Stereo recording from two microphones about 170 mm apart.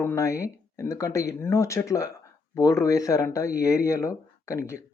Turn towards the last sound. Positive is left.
turn(degrees=15)  # may be behind; listen again after turning